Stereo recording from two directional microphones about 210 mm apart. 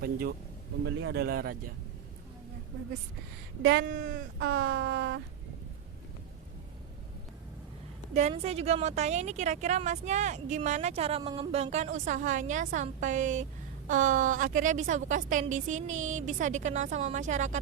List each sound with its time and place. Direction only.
0.0 s speech: 45° right (ahead or behind)
0.9 s speech: 60° right (ahead or behind)
3.6 s speech: 50° right (ahead or behind)
4.4 s a sound: 65° right (ahead or behind)
8.1 s a woman's voice: 30° right (ahead or behind)